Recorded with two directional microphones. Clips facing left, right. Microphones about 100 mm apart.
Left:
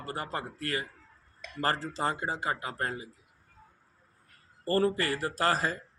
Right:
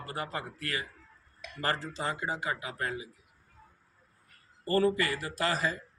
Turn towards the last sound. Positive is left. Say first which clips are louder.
# left 3 dB
turn(degrees=40)  # may be behind; listen again after turning